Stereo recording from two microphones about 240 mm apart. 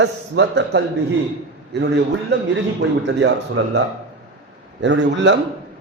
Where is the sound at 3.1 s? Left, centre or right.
Right.